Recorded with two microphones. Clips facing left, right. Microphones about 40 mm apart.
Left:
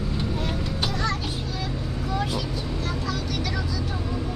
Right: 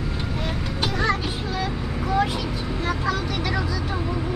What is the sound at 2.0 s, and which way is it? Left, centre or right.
Vehicle, right.